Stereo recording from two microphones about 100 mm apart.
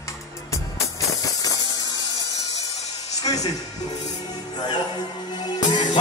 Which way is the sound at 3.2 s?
40° left (ahead or behind).